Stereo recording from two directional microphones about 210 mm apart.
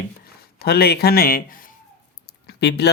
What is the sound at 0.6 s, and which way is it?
Speech, 50° left (ahead or behind).